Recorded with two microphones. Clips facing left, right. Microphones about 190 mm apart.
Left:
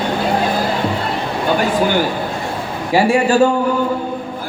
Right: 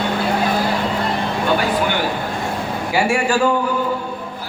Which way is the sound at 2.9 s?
35° left (ahead or behind).